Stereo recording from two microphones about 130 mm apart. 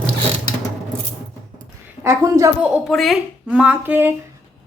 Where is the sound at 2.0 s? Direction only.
25° right (ahead or behind).